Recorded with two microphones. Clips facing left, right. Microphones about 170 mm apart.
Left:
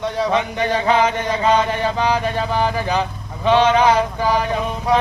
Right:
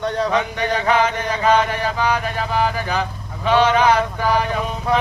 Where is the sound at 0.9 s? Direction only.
25° left (ahead or behind).